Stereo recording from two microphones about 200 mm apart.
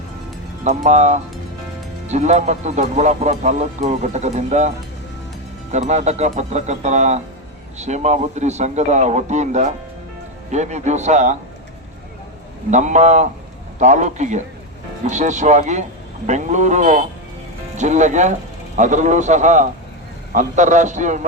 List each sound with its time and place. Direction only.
0.9 s speech: 35° right (ahead or behind)
5.7 s speech: 35° right (ahead or behind)
12.7 s speech: 35° right (ahead or behind)